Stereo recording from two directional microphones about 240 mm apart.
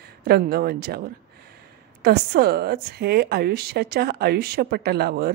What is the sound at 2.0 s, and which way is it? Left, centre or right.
A woman's voice, right.